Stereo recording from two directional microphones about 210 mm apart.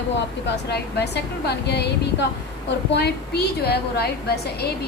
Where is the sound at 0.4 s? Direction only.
55° left (ahead or behind).